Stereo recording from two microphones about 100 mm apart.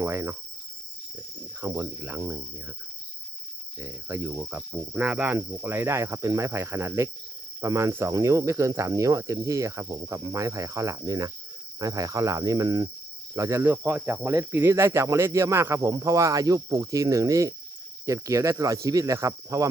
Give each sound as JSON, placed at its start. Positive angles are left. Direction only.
{"t": 0.0, "sound": "cricket", "side_deg": -25}
{"t": 1.6, "sound": "cricket", "side_deg": -25}
{"t": 3.8, "sound": "cricket", "side_deg": -25}
{"t": 7.6, "sound": "speech", "side_deg": -30}
{"t": 13.3, "sound": "speech", "side_deg": -30}